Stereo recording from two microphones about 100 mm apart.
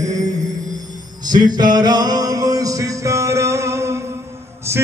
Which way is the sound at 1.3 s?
45° right (ahead or behind).